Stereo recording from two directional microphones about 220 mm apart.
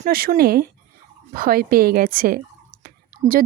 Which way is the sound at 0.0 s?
40° right (ahead or behind).